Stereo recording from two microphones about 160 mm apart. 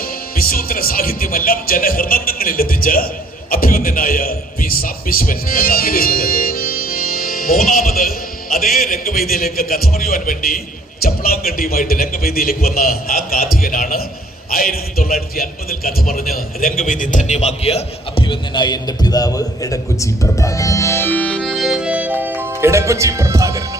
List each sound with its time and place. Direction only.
0.0 s a man's voice: 65° left (ahead or behind); by 23.6 s 20° right (ahead or behind)